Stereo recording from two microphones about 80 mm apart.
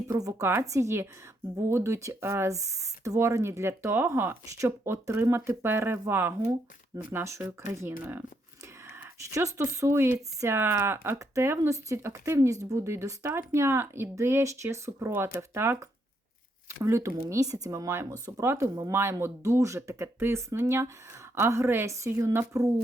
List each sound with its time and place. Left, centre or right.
0.1 s a woman's voice: right